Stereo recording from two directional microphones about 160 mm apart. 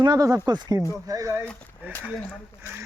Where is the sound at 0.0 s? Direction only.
25° right (ahead or behind).